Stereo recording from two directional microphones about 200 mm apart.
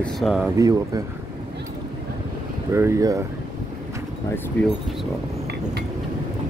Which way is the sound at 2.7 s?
15° right (ahead or behind).